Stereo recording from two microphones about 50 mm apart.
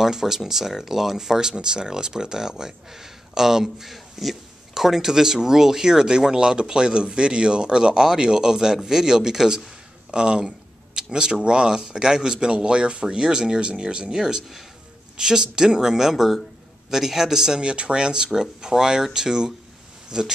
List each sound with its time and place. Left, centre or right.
0.0 s speech: centre